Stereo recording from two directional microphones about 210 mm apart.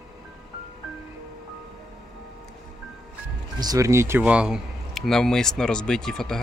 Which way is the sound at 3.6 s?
15° right (ahead or behind).